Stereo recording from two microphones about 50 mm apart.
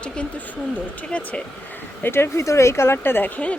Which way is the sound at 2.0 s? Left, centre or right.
Left.